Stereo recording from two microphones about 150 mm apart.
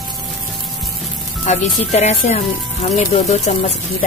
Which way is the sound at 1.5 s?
50° left (ahead or behind).